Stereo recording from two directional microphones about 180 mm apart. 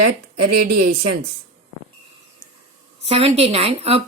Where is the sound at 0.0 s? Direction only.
60° right (ahead or behind).